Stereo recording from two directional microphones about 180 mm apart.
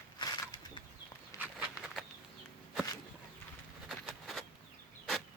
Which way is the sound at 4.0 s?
5° left (ahead or behind).